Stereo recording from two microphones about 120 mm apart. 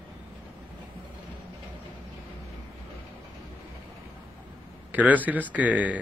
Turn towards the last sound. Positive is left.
turn(degrees=-10)  # may be behind; listen again after turning